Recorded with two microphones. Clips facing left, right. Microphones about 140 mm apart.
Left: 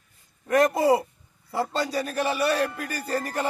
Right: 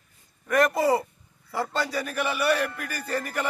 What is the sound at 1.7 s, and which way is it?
Speech, 30° left (ahead or behind).